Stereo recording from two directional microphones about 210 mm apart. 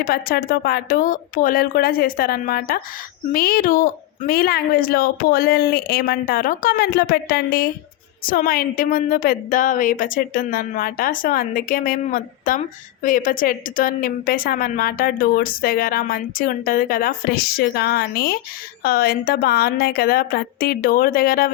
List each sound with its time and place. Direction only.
0.0 s a woman's voice: 45° left (ahead or behind)